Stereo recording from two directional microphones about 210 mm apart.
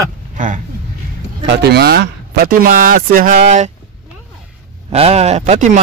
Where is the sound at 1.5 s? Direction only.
50° right (ahead or behind); by 3.7 s 35° right (ahead or behind).